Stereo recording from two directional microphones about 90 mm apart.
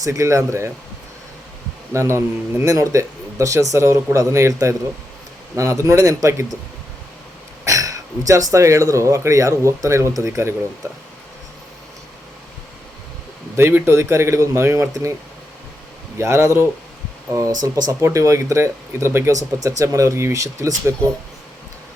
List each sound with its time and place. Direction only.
0.0 s speech: 35° right (ahead or behind)
1.9 s speech: 30° right (ahead or behind)
7.6 s speech: 35° right (ahead or behind)
13.6 s speech: 25° right (ahead or behind)
16.1 s speech: 30° right (ahead or behind)
18.0 s speech: 35° right (ahead or behind)